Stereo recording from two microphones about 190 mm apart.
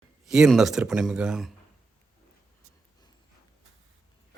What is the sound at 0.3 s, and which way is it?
Speech, centre (ahead or behind).